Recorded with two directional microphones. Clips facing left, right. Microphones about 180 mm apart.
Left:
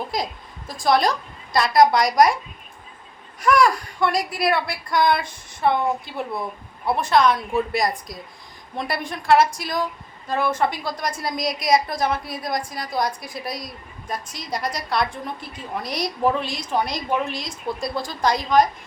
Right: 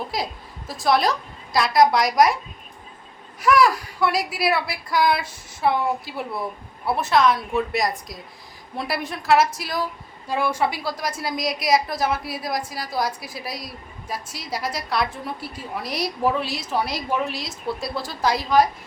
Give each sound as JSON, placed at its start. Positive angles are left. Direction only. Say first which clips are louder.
{"t": 0.1, "sound": "a woman's voice", "louder": "left 1 dB", "side_deg": -5}
{"t": 3.4, "sound": "a woman's voice", "louder": "even", "side_deg": -5}